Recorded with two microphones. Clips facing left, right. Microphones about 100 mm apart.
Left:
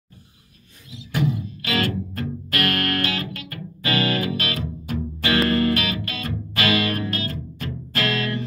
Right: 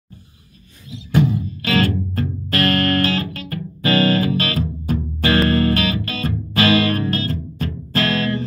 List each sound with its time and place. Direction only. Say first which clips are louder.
0.8 s music: right 6 dB; 30° right (ahead or behind)